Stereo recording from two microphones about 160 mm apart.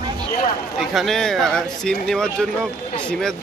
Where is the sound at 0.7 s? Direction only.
Centre (ahead or behind).